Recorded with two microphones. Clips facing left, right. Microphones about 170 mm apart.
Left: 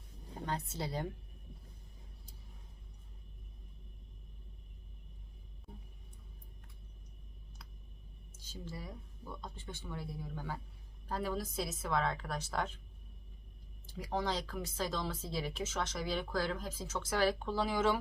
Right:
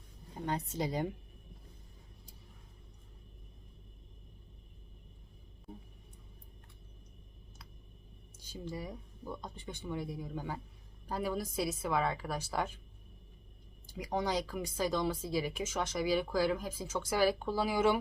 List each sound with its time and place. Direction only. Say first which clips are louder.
0.4 s speech: right 4 dB; 15° right (ahead or behind)
8.4 s speech: right 5 dB; 15° right (ahead or behind)
13.9 s speech: right 3 dB; 15° right (ahead or behind)